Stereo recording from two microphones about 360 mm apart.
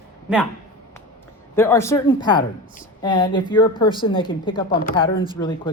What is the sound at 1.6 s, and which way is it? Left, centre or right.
Speech, centre.